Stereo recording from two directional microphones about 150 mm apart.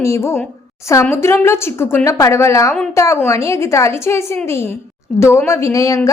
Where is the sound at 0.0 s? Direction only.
20° left (ahead or behind).